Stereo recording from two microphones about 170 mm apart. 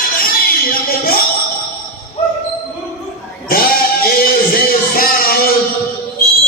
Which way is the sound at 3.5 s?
60° left (ahead or behind).